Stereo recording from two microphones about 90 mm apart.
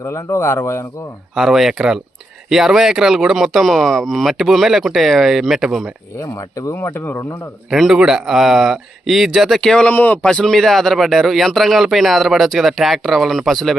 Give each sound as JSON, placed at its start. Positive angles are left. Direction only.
{"t": 0.0, "sound": "speech", "side_deg": 35}
{"t": 1.4, "sound": "a man's voice", "side_deg": -5}
{"t": 6.1, "sound": "speech", "side_deg": 40}
{"t": 7.7, "sound": "a man's voice", "side_deg": -5}
{"t": 9.9, "sound": "a man's voice", "side_deg": 20}